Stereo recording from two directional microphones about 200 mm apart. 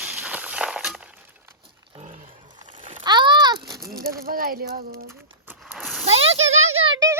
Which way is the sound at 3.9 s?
50° right (ahead or behind).